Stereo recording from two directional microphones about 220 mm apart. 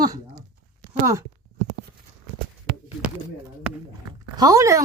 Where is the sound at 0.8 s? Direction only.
15° right (ahead or behind).